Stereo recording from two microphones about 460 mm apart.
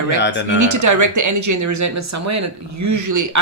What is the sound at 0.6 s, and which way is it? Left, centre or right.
Speech, right.